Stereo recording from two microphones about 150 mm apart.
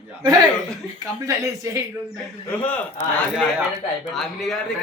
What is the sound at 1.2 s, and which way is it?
Speech, 20° right (ahead or behind).